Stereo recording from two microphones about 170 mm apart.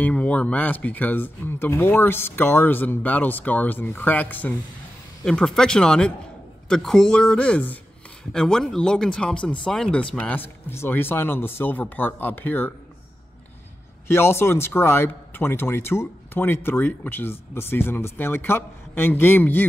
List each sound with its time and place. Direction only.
0.0 s speech: 10° left (ahead or behind)
14.0 s speech: 15° left (ahead or behind)